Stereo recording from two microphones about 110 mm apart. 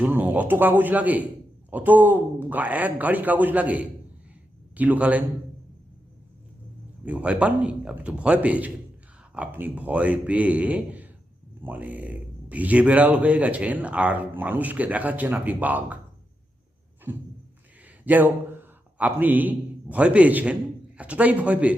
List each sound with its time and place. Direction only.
0.0 s speech: 15° right (ahead or behind)
7.0 s speech: 10° right (ahead or behind)
17.1 s a man's voice: 15° right (ahead or behind)